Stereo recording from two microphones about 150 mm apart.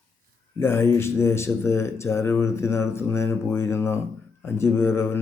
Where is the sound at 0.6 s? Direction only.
15° left (ahead or behind).